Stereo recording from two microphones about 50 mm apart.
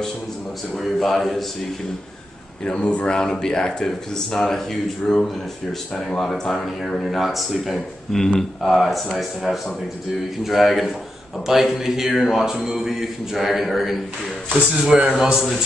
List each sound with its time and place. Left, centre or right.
0.9 s speech: centre
2.6 s a man's voice: centre
14.7 s a man's voice: centre